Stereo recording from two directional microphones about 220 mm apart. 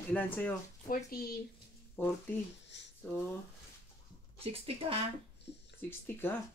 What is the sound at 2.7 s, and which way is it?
Speech, 55° left (ahead or behind).